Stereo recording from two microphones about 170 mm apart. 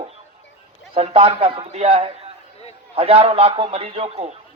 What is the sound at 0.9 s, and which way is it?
A man's voice, 35° right (ahead or behind).